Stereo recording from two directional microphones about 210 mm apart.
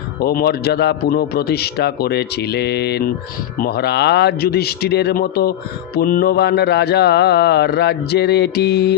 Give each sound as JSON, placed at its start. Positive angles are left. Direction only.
{"t": 0.2, "sound": "a man's voice", "side_deg": 45}